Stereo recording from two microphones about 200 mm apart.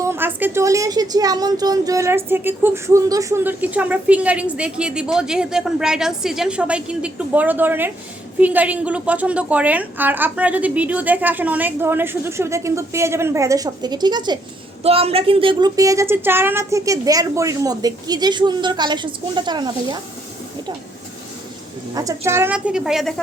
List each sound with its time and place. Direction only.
0.0 s a woman's voice: 10° right (ahead or behind)
21.9 s a woman's voice: 15° right (ahead or behind); by 23.2 s centre (ahead or behind)